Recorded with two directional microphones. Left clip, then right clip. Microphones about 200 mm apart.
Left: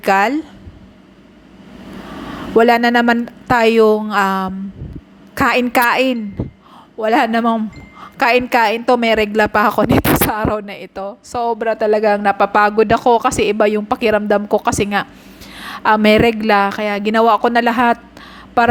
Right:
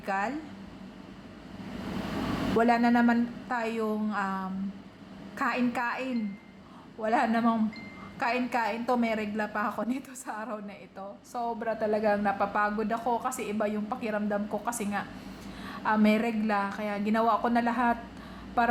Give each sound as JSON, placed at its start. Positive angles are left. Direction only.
{"t": 0.0, "sound": "a woman's voice", "side_deg": 45}
{"t": 2.6, "sound": "a woman's voice", "side_deg": 40}